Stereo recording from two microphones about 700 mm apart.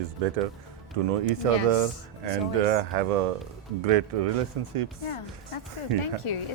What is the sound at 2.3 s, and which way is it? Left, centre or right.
Speech, right.